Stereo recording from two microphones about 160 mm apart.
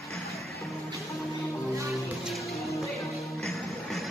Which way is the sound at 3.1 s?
Centre (ahead or behind).